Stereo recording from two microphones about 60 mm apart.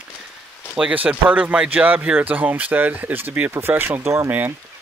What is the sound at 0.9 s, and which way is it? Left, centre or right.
Speech, right.